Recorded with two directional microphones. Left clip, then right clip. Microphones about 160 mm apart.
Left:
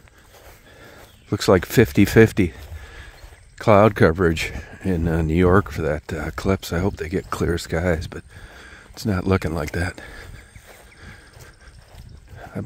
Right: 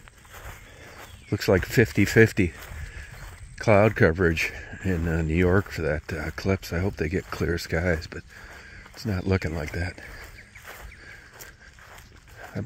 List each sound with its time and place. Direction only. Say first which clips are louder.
1.3 s speech: left 5 dB; 40° left (ahead or behind)
3.5 s speech: left 5 dB; 35° left (ahead or behind)
9.0 s speech: left 6 dB; 40° left (ahead or behind)
9.7 s speech: left 6 dB; 50° left (ahead or behind)